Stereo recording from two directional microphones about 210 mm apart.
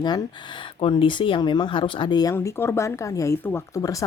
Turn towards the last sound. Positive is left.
turn(degrees=15)  # may be behind; listen again after turning